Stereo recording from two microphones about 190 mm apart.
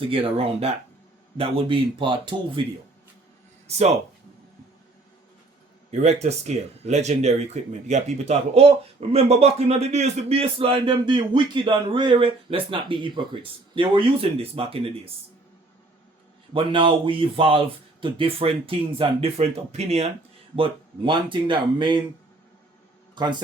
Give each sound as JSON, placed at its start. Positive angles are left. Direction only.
{"t": 0.1, "sound": "speech", "side_deg": -30}
{"t": 5.9, "sound": "speech", "side_deg": -35}
{"t": 16.5, "sound": "speech", "side_deg": -25}